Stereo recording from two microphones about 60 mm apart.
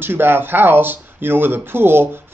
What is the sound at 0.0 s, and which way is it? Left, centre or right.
Speech, right.